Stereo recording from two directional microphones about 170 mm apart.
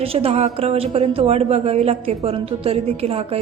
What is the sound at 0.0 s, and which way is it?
A woman's voice, 35° right (ahead or behind).